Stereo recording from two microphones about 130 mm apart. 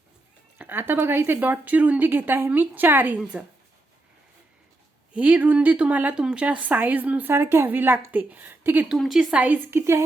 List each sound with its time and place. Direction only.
0.6 s speech: 15° right (ahead or behind)
5.1 s speech: 10° right (ahead or behind)
9.0 s speech: centre (ahead or behind); by 10.0 s 20° right (ahead or behind)